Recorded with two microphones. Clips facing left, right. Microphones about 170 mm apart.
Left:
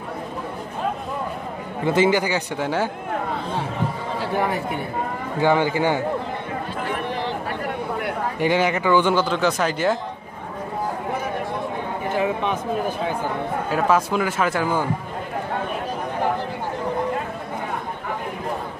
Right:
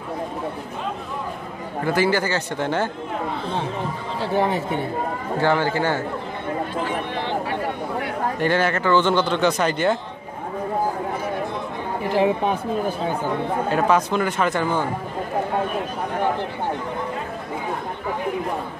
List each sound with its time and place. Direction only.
1.9 s speech: 20° left (ahead or behind)
4.2 s speech: 25° right (ahead or behind)
5.4 s speech: 15° left (ahead or behind)
8.4 s speech: 15° left (ahead or behind)
12.1 s speech: 35° right (ahead or behind)
13.7 s a man's voice: 5° left (ahead or behind)